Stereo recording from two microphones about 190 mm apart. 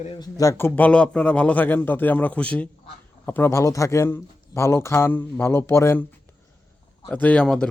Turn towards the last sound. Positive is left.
turn(degrees=5)  # may be behind; listen again after turning